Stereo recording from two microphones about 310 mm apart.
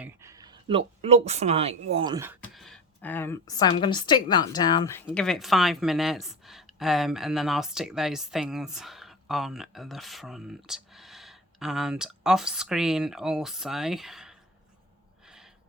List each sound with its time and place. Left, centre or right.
0.0 s speech: centre
2.4 s a woman's voice: centre